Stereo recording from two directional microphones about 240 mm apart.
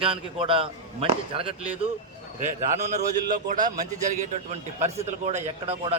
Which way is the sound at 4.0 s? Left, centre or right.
Right.